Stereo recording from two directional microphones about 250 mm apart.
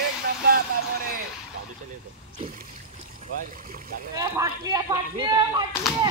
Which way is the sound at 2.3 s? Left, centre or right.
Right.